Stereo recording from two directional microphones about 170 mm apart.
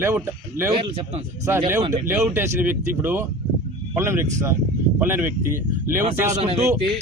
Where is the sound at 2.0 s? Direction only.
10° right (ahead or behind).